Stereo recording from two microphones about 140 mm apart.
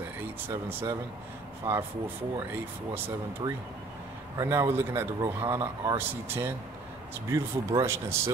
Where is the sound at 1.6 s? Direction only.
15° right (ahead or behind).